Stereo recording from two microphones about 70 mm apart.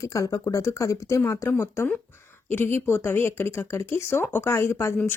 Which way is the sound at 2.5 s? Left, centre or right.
Left.